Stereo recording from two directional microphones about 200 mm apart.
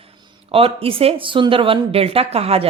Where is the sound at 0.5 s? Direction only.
30° right (ahead or behind).